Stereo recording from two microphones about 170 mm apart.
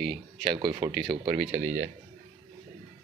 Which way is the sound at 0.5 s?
30° right (ahead or behind).